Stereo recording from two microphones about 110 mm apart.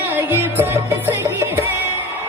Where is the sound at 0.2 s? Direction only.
20° right (ahead or behind).